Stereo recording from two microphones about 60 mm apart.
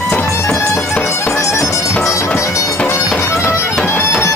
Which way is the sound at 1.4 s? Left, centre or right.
Left.